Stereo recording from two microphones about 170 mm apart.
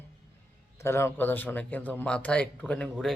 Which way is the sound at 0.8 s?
15° left (ahead or behind).